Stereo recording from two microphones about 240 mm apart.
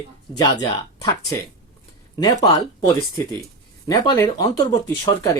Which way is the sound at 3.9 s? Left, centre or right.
Centre.